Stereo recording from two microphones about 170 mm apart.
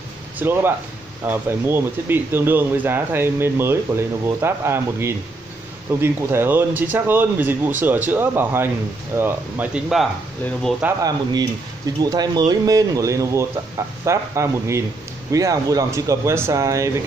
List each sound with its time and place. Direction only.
0.4 s speech: 10° right (ahead or behind)
11.0 s a man's voice: 20° right (ahead or behind)